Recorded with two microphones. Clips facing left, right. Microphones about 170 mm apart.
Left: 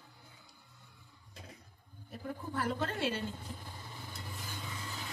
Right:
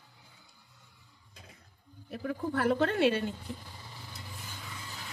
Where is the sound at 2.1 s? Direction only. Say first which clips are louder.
Right 7 dB; 80° right.